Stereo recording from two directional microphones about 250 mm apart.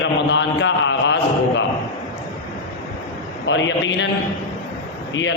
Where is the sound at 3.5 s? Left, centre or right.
Left.